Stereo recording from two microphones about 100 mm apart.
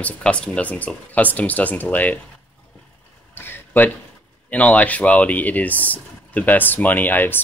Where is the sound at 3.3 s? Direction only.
20° left (ahead or behind).